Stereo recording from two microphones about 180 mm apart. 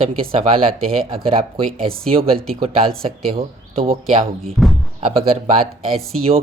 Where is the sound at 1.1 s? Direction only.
35° right (ahead or behind).